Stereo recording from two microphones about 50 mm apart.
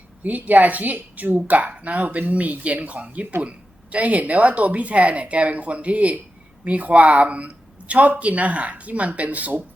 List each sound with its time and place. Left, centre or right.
0.2 s a woman's voice: right